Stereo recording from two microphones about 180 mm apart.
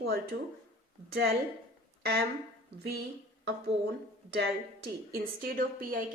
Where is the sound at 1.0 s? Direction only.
60° right (ahead or behind).